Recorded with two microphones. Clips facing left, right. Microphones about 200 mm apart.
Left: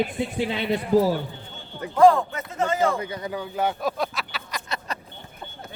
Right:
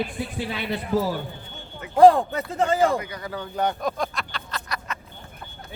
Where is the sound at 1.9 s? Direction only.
35° right (ahead or behind).